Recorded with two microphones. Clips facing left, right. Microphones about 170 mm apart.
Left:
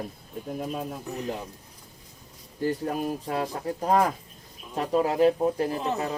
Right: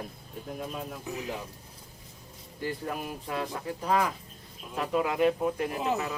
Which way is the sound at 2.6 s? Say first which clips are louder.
Left 6 dB; 40° left (ahead or behind).